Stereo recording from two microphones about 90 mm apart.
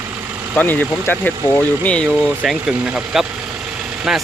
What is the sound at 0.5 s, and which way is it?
Speech, 20° left (ahead or behind).